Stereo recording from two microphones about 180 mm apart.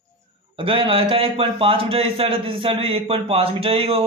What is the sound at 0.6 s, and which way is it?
A man's voice, 30° right (ahead or behind).